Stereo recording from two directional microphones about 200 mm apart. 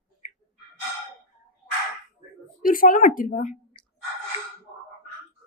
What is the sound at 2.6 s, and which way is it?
Speech, 45° left (ahead or behind).